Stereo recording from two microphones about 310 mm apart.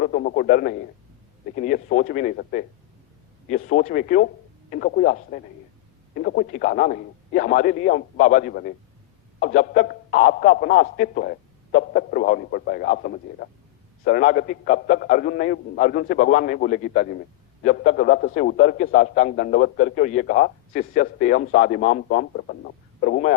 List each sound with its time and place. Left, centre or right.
0.0 s a man's voice: left